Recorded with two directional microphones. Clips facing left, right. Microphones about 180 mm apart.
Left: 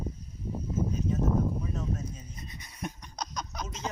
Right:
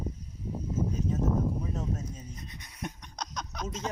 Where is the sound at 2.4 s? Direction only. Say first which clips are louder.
Left 2 dB; centre (ahead or behind).